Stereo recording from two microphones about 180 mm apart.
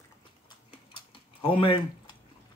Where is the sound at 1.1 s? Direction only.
30° left (ahead or behind).